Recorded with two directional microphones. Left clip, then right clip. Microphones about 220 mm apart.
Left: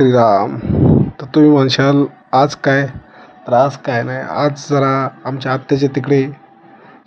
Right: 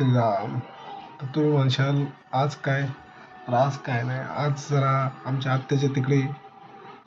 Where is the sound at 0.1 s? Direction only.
45° left (ahead or behind).